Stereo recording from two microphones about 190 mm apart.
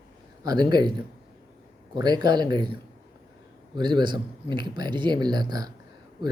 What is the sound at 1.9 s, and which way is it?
Speech, 20° right (ahead or behind).